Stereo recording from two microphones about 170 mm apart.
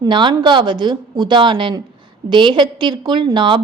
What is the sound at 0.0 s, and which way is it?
A woman's voice, 25° right (ahead or behind).